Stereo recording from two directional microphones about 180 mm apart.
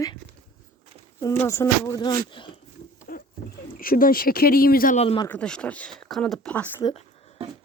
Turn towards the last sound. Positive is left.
turn(degrees=10)  # may be behind; listen again after turning